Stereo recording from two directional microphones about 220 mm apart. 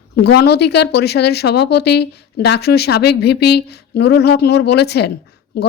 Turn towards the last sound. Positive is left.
turn(degrees=50)  # may be behind; listen again after turning